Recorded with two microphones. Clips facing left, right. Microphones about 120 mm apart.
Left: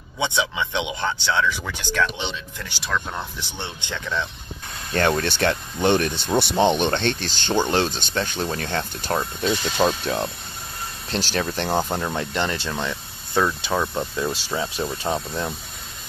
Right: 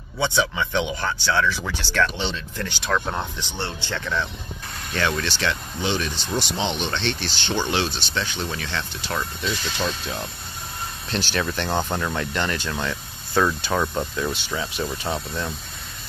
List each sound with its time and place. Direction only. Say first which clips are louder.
0.2 s speech: right 1 dB; 20° left (ahead or behind)
2.9 s speech: right 2 dB; 10° right (ahead or behind)
3.3 s speech: right 3 dB; 15° left (ahead or behind)
4.9 s speech: left 4 dB; 45° left (ahead or behind)
9.8 s speech: left 6 dB; 55° left (ahead or behind)
11.1 s speech: left 1 dB; 40° left (ahead or behind)
11.7 s speech: left 2 dB; 10° left (ahead or behind)
12.2 s speech: left 1 dB; 25° left (ahead or behind)
13.7 s speech: even; 5° left (ahead or behind)
14.3 s speech: left 2 dB; 30° left (ahead or behind)